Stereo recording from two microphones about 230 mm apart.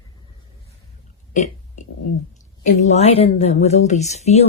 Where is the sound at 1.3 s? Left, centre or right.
Left.